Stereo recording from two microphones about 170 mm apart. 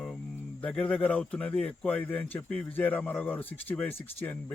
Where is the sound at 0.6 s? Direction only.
5° left (ahead or behind).